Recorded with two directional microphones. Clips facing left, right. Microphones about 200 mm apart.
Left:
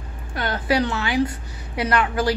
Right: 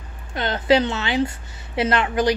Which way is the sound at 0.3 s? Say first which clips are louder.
Right 4 dB; 20° right (ahead or behind).